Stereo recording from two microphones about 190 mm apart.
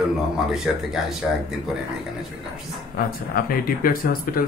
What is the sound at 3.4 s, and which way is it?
Speech, 50° left (ahead or behind).